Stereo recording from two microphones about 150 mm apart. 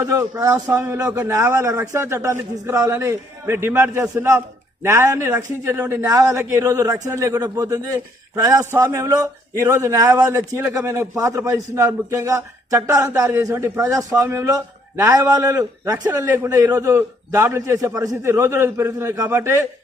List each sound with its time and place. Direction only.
0.0 s a man's voice: 20° right (ahead or behind)